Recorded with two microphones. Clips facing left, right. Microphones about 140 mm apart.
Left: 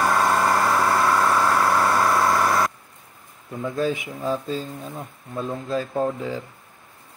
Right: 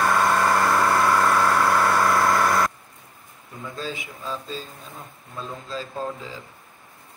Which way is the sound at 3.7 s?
60° left (ahead or behind).